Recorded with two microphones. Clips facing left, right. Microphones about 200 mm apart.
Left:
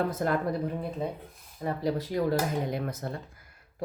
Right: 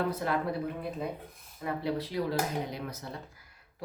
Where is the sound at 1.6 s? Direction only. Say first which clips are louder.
Left 3 dB; 40° left (ahead or behind).